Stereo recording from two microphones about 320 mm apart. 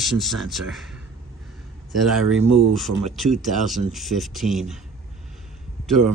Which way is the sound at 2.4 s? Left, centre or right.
Right.